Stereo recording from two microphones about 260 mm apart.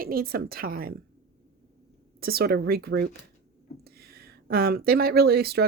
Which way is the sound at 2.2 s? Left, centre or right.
Right.